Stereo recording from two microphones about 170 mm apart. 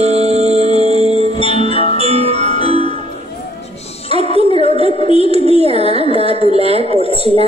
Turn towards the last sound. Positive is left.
turn(degrees=-35)  # may be behind; listen again after turning